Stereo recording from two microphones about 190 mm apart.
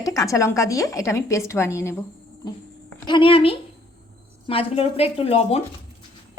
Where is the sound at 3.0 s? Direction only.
25° left (ahead or behind).